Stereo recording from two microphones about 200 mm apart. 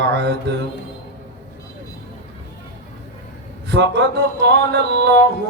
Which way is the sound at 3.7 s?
55° right (ahead or behind).